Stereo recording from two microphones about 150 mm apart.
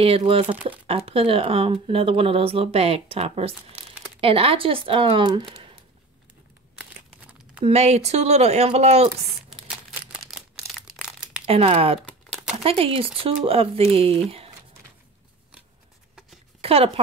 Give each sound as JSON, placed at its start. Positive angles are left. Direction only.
{"t": 0.0, "sound": "speech", "side_deg": -40}
{"t": 6.8, "sound": "crumpling", "side_deg": -5}
{"t": 7.6, "sound": "speech", "side_deg": -45}
{"t": 9.5, "sound": "crumpling", "side_deg": -5}
{"t": 11.4, "sound": "speech", "side_deg": -40}
{"t": 12.1, "sound": "crumpling", "side_deg": -5}
{"t": 12.6, "sound": "speech", "side_deg": -40}
{"t": 16.6, "sound": "speech", "side_deg": -40}